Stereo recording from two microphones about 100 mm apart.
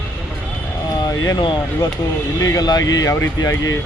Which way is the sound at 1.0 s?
40° left (ahead or behind).